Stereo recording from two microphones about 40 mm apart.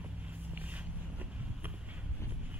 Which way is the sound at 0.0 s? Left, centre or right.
Right.